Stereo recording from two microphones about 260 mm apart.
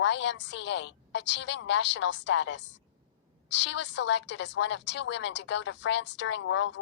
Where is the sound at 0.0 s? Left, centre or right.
Left.